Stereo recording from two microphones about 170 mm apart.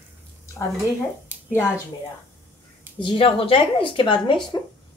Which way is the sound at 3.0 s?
30° left (ahead or behind).